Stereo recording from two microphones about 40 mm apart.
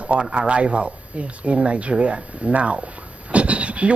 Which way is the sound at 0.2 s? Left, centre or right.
Right.